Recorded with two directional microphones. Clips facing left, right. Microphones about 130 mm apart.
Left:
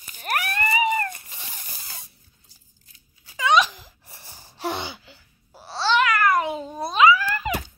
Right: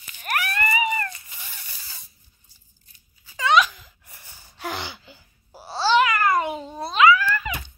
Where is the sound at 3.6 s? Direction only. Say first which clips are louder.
Even; 35° left (ahead or behind).